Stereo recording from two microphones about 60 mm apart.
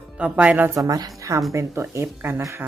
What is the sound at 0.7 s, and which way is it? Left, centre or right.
Speech, right.